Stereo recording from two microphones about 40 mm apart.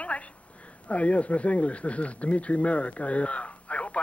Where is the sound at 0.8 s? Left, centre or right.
Left.